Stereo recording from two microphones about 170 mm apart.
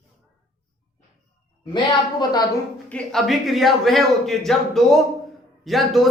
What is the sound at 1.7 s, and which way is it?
Speech, 25° left (ahead or behind).